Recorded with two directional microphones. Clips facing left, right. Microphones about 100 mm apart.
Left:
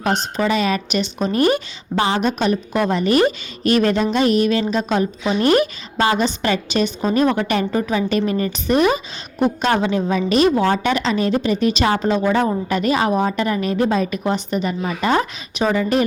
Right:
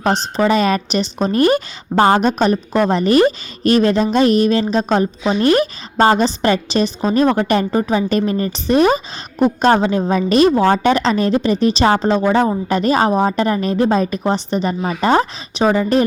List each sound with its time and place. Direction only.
0.0 s a woman's voice: 35° right (ahead or behind)